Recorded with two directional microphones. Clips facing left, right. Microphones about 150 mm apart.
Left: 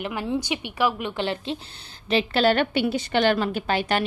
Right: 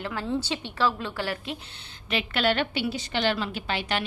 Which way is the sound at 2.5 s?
50° left (ahead or behind).